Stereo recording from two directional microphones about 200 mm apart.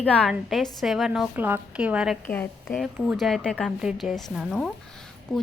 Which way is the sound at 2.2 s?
10° left (ahead or behind).